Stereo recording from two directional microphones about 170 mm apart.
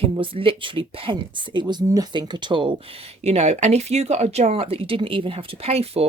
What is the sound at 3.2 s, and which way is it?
Speech, 40° right (ahead or behind).